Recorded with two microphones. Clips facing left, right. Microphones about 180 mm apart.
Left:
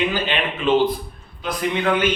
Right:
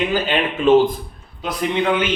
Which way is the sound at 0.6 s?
45° right (ahead or behind).